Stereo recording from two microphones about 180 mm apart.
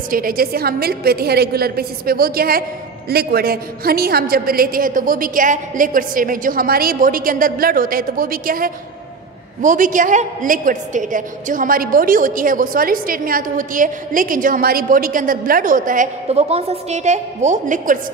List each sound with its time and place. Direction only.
0.1 s a woman's voice: 55° right (ahead or behind)